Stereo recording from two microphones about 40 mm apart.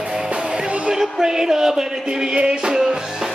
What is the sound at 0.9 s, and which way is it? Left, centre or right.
Speech, centre.